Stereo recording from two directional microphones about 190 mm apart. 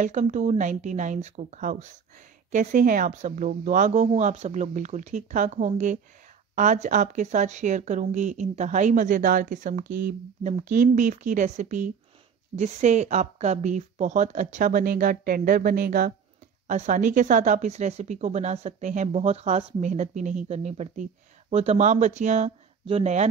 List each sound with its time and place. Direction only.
0.0 s speech: 40° right (ahead or behind)